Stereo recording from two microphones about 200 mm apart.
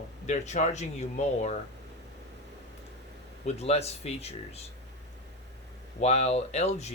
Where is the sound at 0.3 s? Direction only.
35° left (ahead or behind).